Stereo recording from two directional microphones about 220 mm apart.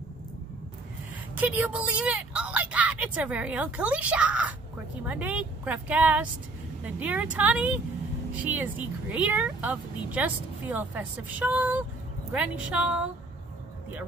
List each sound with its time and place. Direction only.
1.3 s a woman's voice: 5° right (ahead or behind)